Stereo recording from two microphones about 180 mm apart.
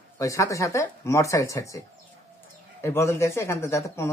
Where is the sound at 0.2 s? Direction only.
15° left (ahead or behind).